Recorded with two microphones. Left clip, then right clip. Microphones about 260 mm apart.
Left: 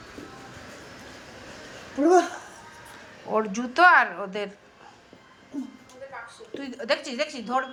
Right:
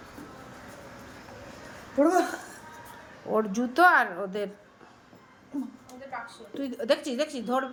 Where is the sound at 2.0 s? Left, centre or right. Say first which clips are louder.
Left 3 dB; right.